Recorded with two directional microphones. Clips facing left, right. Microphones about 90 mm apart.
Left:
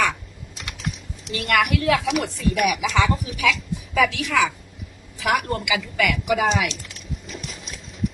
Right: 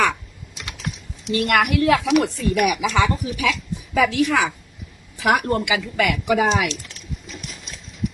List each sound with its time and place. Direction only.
1.3 s speech: 40° right (ahead or behind)